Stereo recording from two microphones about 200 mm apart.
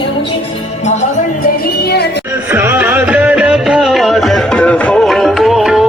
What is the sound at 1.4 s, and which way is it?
Music, 50° left (ahead or behind).